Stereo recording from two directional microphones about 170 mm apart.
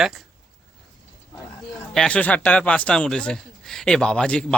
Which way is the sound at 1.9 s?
5° left (ahead or behind).